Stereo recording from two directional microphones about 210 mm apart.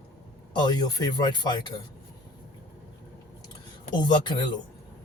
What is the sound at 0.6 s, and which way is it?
Speech, 20° left (ahead or behind).